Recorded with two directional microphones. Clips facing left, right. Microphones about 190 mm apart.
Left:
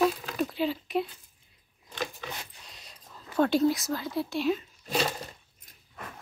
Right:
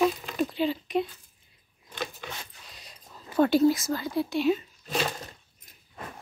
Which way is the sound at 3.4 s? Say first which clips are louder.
Right 3 dB; 5° right (ahead or behind).